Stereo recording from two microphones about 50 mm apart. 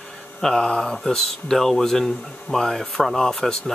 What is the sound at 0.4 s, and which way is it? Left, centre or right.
Speech, centre.